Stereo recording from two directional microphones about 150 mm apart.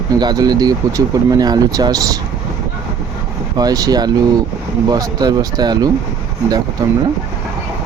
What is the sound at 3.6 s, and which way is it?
Speech, 25° right (ahead or behind).